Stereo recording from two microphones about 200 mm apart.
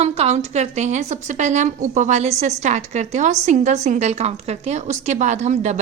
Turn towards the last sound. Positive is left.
turn(degrees=-35)  # may be behind; listen again after turning